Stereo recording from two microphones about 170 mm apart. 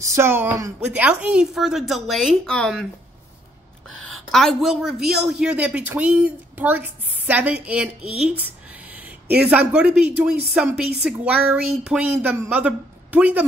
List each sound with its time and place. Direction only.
0.0 s a woman's voice: 15° right (ahead or behind); by 2.9 s centre (ahead or behind)
3.9 s speech: 5° left (ahead or behind)
9.4 s a woman's voice: 10° right (ahead or behind)